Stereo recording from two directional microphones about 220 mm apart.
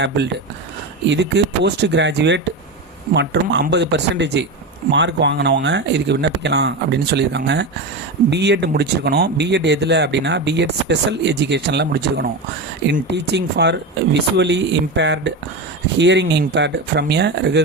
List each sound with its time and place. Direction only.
1.0 s speech: 55° right (ahead or behind)